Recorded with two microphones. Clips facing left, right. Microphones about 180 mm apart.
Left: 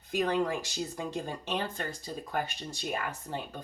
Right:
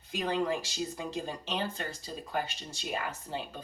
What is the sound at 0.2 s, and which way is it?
Speech, 50° left (ahead or behind).